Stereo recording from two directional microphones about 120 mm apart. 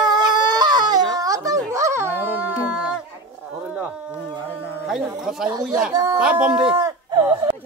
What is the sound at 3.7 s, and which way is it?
Insect, 10° right (ahead or behind).